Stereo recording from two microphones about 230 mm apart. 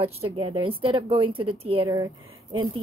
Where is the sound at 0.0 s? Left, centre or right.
Right.